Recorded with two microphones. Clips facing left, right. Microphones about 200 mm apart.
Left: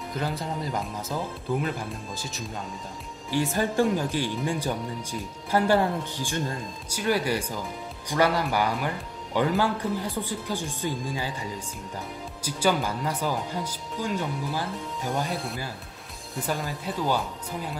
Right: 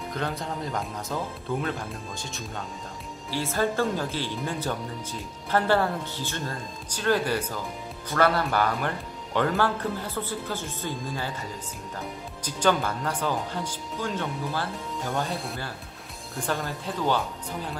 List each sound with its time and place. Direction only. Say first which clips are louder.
0.1 s speech: left 1 dB; 5° left (ahead or behind)
3.3 s speech: left 1 dB; 15° left (ahead or behind)
12.4 s speech: right 1 dB; 10° left (ahead or behind)
16.3 s speech: even; 5° left (ahead or behind)